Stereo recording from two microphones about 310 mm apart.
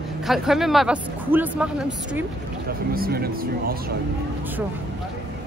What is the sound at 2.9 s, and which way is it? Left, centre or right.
Speech, right.